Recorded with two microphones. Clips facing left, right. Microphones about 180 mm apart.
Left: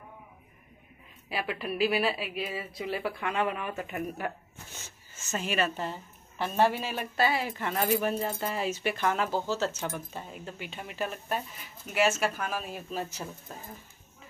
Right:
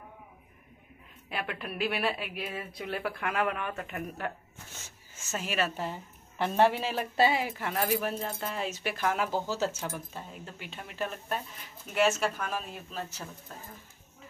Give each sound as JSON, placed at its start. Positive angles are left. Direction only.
{"t": 1.3, "sound": "speech", "side_deg": 5}
{"t": 5.1, "sound": "speech", "side_deg": -5}
{"t": 6.3, "sound": "speech", "side_deg": -20}
{"t": 7.4, "sound": "speech", "side_deg": -5}